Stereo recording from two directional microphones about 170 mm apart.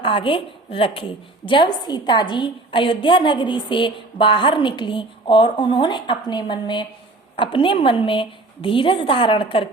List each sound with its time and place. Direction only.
0.0 s a woman's voice: 30° left (ahead or behind)